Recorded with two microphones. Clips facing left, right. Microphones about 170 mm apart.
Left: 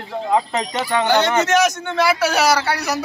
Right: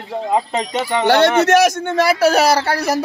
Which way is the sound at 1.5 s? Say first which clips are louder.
Right 4 dB; 50° right (ahead or behind).